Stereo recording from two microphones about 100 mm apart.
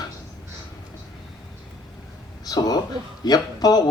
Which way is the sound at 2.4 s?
40° left (ahead or behind).